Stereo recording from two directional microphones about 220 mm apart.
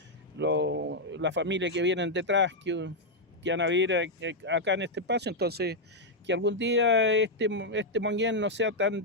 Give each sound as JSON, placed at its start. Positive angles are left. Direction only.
{"t": 0.3, "sound": "speech", "side_deg": -55}